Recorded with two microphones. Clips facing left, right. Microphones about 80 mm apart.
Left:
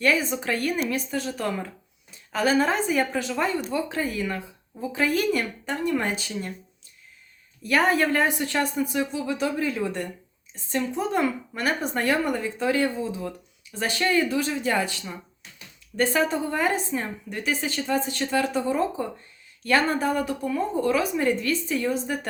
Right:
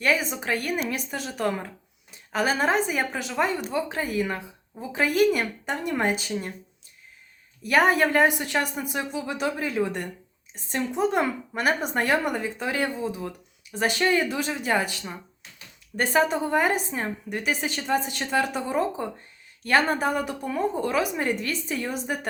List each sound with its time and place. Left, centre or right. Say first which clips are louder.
0.0 s a woman's voice: left 1 dB; centre
7.6 s a woman's voice: right 1 dB; centre